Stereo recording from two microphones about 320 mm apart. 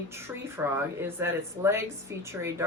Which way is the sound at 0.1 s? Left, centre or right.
Centre.